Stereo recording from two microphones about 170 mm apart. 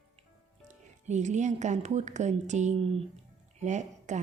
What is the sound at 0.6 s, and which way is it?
Speech, 45° right (ahead or behind).